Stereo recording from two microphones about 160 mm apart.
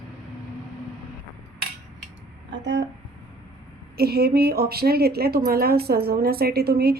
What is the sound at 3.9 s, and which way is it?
A woman's voice, 80° right.